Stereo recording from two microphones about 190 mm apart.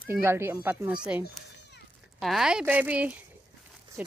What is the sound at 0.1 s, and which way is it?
Speech, 10° right (ahead or behind).